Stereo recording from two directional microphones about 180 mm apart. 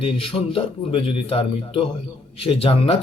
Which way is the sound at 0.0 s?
30° left (ahead or behind).